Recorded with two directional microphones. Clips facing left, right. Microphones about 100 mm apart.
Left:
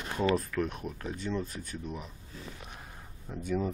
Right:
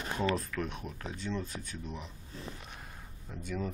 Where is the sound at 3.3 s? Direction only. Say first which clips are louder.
Left 5 dB; 10° left (ahead or behind).